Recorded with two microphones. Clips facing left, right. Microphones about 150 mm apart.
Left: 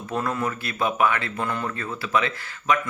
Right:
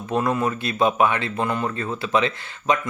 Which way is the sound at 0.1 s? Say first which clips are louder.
Right 4 dB; 20° right (ahead or behind).